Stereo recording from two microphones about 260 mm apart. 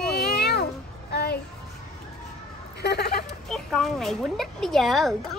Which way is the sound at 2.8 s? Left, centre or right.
Left.